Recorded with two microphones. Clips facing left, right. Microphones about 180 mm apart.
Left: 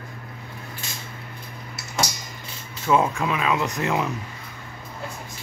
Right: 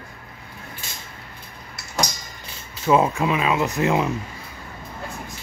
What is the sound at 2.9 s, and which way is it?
Speech, 15° right (ahead or behind).